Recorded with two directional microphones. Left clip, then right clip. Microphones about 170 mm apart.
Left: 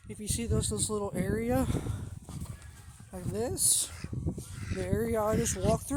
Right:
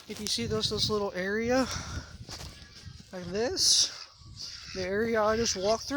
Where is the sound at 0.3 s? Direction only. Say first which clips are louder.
Right 5 dB; 5° left (ahead or behind).